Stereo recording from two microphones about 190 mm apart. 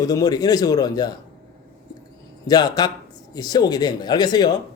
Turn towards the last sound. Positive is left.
turn(degrees=20)  # may be behind; listen again after turning